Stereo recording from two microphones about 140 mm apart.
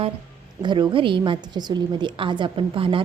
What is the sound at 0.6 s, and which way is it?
A woman's voice, 35° right (ahead or behind).